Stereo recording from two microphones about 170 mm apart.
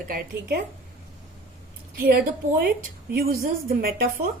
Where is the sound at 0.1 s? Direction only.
70° right (ahead or behind).